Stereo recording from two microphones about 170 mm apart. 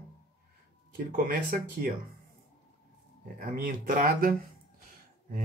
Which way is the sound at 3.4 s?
55° right (ahead or behind).